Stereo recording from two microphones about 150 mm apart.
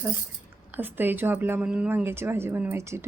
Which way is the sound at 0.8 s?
15° right (ahead or behind).